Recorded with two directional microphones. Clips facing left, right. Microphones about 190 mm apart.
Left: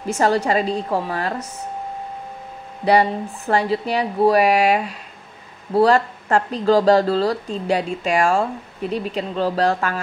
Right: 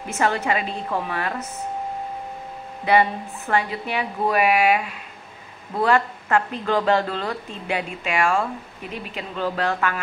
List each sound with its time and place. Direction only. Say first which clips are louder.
0.5 s speech: left 5 dB; 35° left (ahead or behind)
2.8 s speech: left 3 dB; 35° left (ahead or behind)